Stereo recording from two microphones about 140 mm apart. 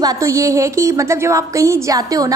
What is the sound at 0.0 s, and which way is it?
A woman's voice, 25° right (ahead or behind).